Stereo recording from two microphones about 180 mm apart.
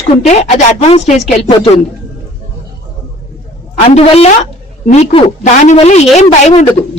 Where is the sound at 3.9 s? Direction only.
35° left (ahead or behind).